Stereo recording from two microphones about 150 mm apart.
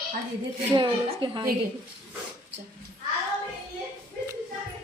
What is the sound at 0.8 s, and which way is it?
Speech, 35° right (ahead or behind).